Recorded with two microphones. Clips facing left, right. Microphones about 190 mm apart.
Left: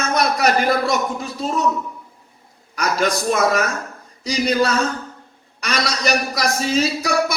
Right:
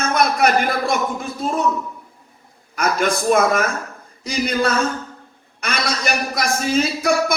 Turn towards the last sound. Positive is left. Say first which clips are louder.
# right 2 dB
turn(degrees=-55)  # may be behind; listen again after turning